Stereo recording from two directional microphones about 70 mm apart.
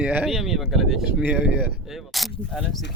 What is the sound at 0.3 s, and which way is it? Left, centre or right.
Speech, centre.